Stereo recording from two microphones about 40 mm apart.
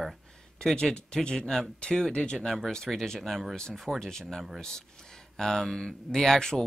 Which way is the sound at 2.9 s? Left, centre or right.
Centre.